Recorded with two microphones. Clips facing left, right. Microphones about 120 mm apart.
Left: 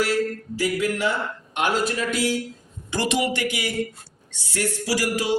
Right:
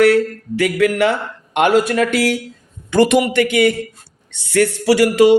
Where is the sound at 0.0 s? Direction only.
65° right (ahead or behind).